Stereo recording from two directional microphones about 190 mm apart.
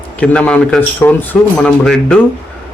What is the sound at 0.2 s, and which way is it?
Speech, 5° left (ahead or behind).